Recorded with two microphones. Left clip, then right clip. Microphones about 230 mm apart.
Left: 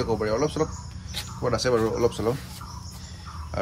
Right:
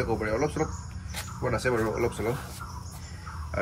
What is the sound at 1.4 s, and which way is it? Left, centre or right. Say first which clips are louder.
Speech: left 3 dB; centre.